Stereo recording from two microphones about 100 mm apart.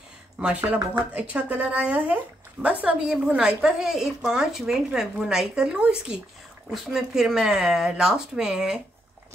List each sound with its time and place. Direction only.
0.4 s a woman's voice: 15° right (ahead or behind)